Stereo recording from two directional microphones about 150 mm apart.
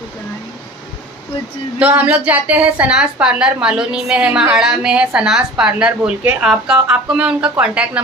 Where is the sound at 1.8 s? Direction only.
10° right (ahead or behind).